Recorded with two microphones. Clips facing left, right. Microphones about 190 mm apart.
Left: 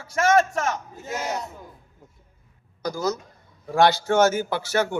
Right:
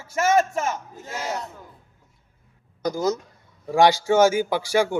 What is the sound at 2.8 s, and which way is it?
A man's voice, 20° right (ahead or behind).